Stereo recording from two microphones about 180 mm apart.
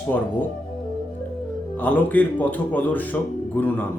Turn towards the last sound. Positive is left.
turn(degrees=10)  # may be behind; listen again after turning